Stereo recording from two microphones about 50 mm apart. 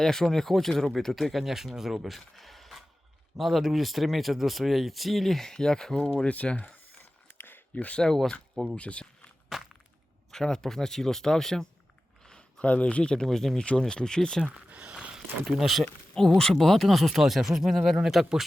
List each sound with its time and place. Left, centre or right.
0.0 s speech: centre
6.2 s speech: left
7.3 s a sound: left
8.0 s speech: centre
8.7 s speech: left
9.5 s crushing: centre
10.3 s speech: centre
12.2 s a sound: centre
12.5 s speech: left; by 14.4 s centre
14.4 s a sound: right
15.1 s speech: centre
16.4 s speech: centre